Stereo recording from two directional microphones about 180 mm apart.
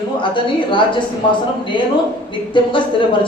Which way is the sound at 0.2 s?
25° left (ahead or behind).